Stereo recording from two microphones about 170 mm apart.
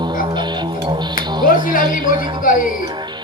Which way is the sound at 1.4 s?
55° left (ahead or behind).